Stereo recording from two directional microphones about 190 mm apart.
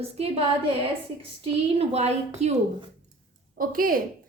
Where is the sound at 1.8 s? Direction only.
35° right (ahead or behind).